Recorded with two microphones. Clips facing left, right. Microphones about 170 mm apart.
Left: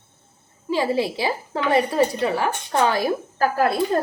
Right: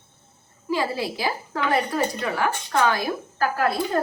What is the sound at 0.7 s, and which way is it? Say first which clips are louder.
Speech: left 4 dB; 25° left (ahead or behind).